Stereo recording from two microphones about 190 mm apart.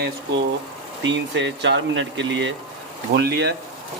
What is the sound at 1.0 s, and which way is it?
Speech, 70° right (ahead or behind).